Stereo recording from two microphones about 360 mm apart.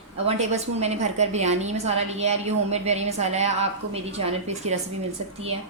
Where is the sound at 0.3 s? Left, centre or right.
Centre.